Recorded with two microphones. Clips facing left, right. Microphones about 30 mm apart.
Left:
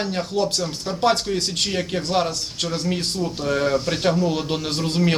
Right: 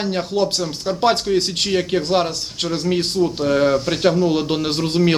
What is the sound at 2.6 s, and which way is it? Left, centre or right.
Speech, right.